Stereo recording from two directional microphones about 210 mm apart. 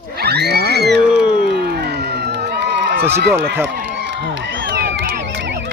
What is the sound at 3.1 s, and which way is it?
Speech, 55° right (ahead or behind).